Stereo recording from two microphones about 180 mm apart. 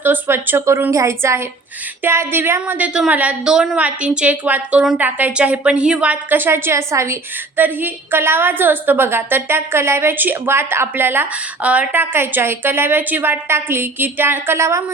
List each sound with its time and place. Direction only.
0.0 s a woman's voice: 10° right (ahead or behind)